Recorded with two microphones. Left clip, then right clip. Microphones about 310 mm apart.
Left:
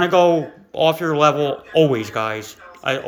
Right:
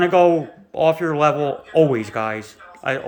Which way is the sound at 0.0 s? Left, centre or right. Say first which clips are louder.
Even; centre.